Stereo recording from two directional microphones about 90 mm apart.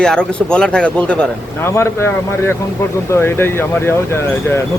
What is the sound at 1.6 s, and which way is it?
Speech, 30° left (ahead or behind).